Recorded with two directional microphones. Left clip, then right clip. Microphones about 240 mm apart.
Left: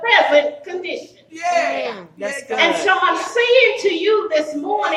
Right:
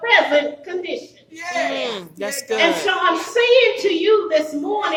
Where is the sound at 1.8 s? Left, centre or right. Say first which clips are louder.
Even; right.